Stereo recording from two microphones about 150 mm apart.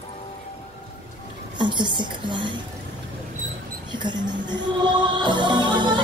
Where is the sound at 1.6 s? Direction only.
30° right (ahead or behind).